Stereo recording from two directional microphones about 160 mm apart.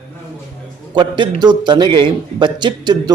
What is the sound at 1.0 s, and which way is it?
A man's voice, 30° right (ahead or behind).